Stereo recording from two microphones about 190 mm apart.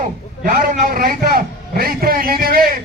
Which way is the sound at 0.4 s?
50° right (ahead or behind).